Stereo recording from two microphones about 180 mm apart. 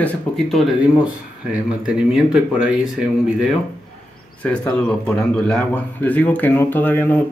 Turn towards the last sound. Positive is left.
turn(degrees=10)  # may be behind; listen again after turning